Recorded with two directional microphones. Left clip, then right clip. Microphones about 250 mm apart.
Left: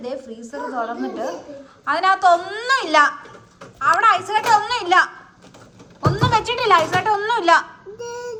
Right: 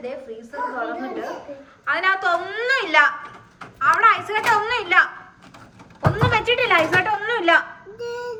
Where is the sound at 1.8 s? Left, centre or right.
Centre.